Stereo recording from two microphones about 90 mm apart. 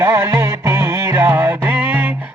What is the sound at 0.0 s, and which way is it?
Music, 25° right (ahead or behind).